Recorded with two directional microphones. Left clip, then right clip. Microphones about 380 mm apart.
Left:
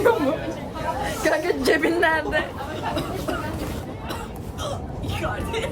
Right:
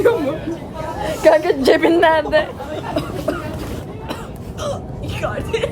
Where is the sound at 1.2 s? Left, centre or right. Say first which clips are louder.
Right 10 dB; centre.